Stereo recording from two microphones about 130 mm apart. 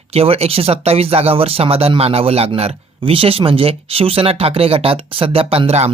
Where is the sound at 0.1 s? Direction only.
50° right (ahead or behind).